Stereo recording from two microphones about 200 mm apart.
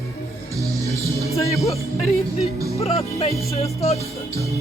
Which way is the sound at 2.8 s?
30° left (ahead or behind).